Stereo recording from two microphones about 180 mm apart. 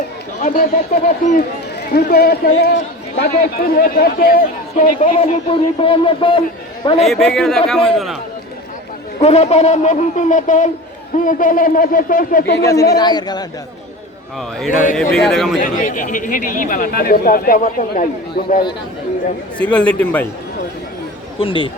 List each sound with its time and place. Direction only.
0.4 s speech: 50° left (ahead or behind)
1.8 s a man's voice: 55° left (ahead or behind)
3.7 s speech: 55° left (ahead or behind); by 6.4 s 30° left (ahead or behind)
7.0 s a man's voice: centre (ahead or behind)
9.2 s speech: 35° left (ahead or behind)
12.6 s speech: 20° left (ahead or behind)
14.9 s a man's voice: 5° left (ahead or behind)
15.6 s speech: 50° left (ahead or behind)
19.5 s a man's voice: 5° left (ahead or behind)
21.3 s speech: 30° left (ahead or behind)